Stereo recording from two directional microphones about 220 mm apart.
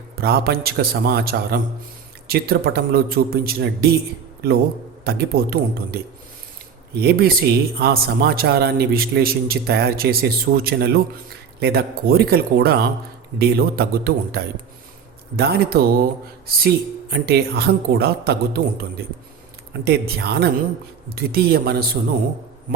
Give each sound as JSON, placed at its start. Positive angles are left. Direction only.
{"t": 0.2, "sound": "a man's voice", "side_deg": -45}